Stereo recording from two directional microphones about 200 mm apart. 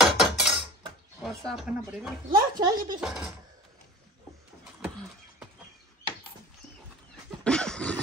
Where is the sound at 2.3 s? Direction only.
20° right (ahead or behind).